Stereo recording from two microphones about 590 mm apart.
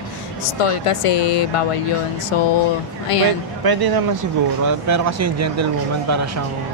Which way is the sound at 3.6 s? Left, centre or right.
Right.